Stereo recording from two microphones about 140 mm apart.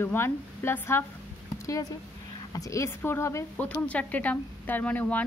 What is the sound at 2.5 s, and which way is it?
A woman's voice, 25° left (ahead or behind).